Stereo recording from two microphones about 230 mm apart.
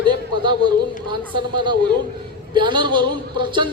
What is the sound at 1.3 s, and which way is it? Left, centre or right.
A man's voice, centre.